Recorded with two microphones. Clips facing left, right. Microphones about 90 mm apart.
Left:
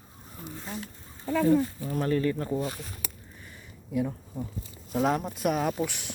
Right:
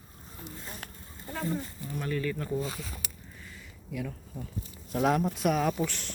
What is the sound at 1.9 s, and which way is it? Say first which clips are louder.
Speech: left 4 dB; 40° left (ahead or behind).